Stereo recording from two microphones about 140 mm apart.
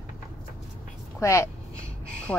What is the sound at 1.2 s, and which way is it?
Speech, 20° left (ahead or behind).